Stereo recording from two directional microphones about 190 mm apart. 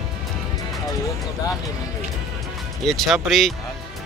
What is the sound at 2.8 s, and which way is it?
Speech, centre (ahead or behind).